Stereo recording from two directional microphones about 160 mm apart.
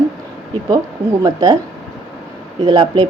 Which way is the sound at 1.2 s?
25° right (ahead or behind).